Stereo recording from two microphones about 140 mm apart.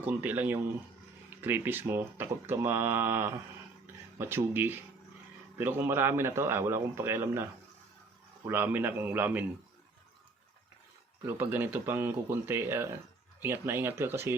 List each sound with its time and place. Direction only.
0.0 s speech: 10° right (ahead or behind)
8.4 s speech: 15° right (ahead or behind)
11.3 s speech: 15° right (ahead or behind)